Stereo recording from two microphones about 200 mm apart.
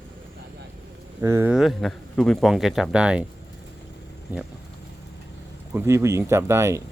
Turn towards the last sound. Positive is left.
turn(degrees=-15)  # may be behind; listen again after turning